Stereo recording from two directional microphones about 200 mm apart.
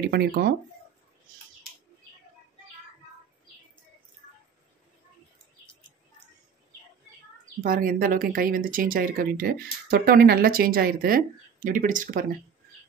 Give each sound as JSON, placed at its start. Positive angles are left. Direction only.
{"t": 0.0, "sound": "speech", "side_deg": -55}
{"t": 7.6, "sound": "speech", "side_deg": -45}